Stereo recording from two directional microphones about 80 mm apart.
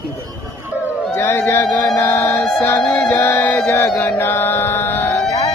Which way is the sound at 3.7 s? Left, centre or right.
Left.